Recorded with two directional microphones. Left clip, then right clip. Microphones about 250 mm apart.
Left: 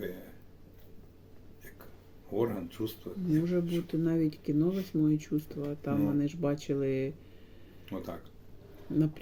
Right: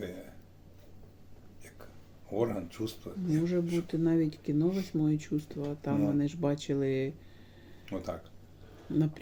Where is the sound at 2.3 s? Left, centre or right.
Centre.